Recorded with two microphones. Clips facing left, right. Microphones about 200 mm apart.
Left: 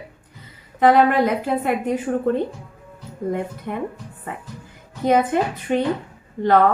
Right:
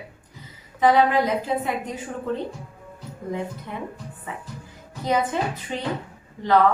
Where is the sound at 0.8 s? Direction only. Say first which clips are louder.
Left 3 dB; 60° left (ahead or behind).